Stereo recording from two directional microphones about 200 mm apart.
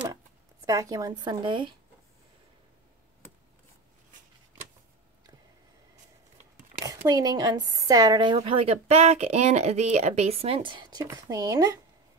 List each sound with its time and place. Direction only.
0.7 s speech: 20° right (ahead or behind)
6.8 s speech: 15° right (ahead or behind)